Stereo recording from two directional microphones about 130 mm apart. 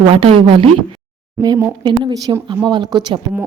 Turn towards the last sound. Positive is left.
turn(degrees=-35)  # may be behind; listen again after turning